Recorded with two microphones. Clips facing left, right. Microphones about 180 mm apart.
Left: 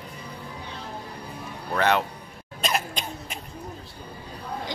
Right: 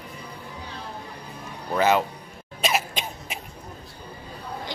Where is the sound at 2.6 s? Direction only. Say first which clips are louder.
Right 2 dB; 5° right (ahead or behind).